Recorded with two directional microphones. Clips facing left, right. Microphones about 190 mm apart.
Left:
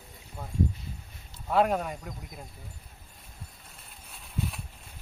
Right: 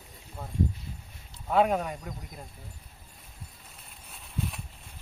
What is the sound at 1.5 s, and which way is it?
Speech, centre (ahead or behind).